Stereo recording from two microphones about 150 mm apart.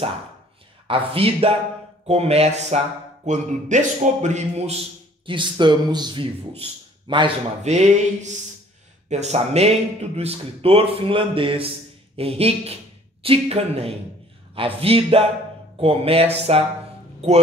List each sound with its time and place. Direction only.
0.8 s a man's voice: 40° right (ahead or behind)
5.2 s a man's voice: 30° right (ahead or behind)
7.6 s a man's voice: 50° right (ahead or behind)